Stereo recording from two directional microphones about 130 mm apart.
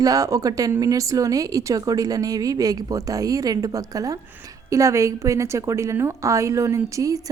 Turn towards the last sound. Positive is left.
turn(degrees=-25)  # may be behind; listen again after turning